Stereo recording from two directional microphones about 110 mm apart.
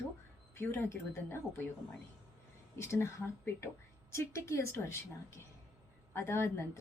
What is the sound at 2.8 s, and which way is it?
A woman's voice, 25° left (ahead or behind).